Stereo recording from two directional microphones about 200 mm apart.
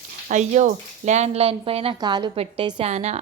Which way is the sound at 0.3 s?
35° right (ahead or behind).